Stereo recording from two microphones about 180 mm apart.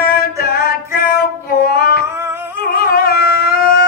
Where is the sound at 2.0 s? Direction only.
15° right (ahead or behind).